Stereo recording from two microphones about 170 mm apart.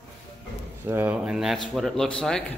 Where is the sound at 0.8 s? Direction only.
10° right (ahead or behind).